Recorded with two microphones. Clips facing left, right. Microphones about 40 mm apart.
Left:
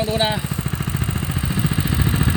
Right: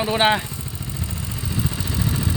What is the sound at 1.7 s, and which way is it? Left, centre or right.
Vehicle, left.